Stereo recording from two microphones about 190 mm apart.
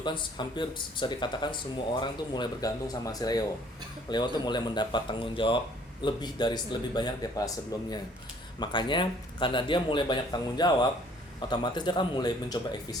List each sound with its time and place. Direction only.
0.0 s speech: 25° left (ahead or behind)